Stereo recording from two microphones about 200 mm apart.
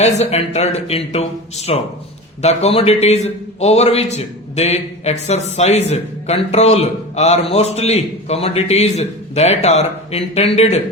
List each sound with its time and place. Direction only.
0.0 s a man's voice: 35° left (ahead or behind)